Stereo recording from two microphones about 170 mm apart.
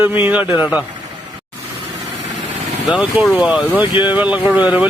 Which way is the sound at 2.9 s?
5° right (ahead or behind).